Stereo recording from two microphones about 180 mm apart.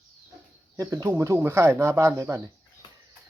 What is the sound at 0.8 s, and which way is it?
Speech, 20° right (ahead or behind).